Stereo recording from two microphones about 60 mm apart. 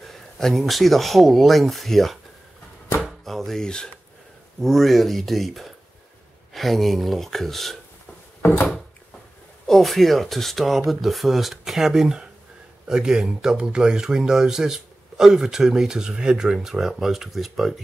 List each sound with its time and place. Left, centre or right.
0.0 s speech: centre
3.3 s speech: centre
8.4 s drawer open or close: left
9.7 s speech: centre